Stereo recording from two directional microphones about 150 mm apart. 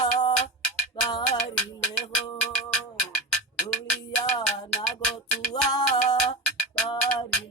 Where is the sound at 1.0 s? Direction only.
30° left (ahead or behind).